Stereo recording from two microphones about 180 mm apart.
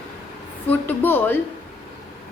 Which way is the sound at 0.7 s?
10° left (ahead or behind).